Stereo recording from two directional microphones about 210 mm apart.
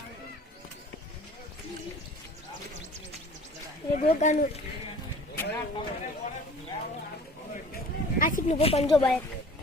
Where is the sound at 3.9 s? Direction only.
35° left (ahead or behind).